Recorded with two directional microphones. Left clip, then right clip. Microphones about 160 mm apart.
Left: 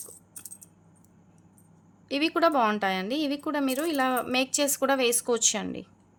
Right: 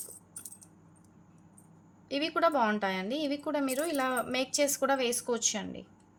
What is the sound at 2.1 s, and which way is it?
A woman's voice, 30° left (ahead or behind).